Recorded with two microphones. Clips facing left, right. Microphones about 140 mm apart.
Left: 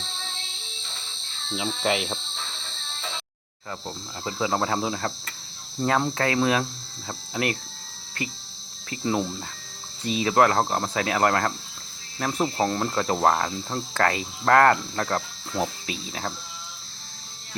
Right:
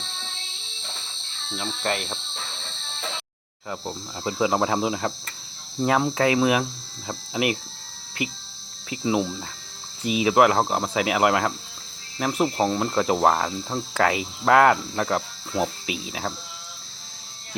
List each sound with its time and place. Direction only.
1.5 s cricket: 5° left (ahead or behind)
3.7 s cricket: 15° right (ahead or behind)